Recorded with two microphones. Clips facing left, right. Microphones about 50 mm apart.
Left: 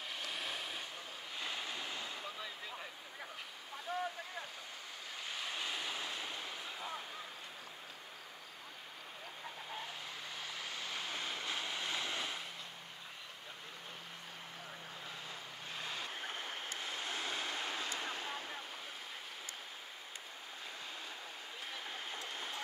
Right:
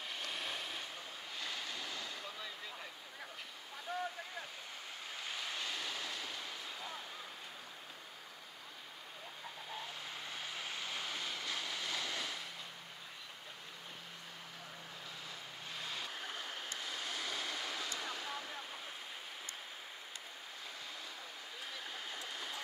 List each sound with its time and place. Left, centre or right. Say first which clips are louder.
0.1 s waves: even; centre
1.4 s waves: left 2 dB; centre
5.5 s waves: left 2 dB; centre
11.1 s waves: left 1 dB; left
15.8 s a sound: left 1 dB; left
16.7 s waves: left 1 dB; left
21.9 s stream: left 1 dB; left